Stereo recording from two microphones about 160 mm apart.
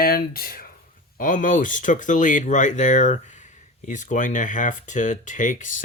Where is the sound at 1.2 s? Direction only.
55° left (ahead or behind).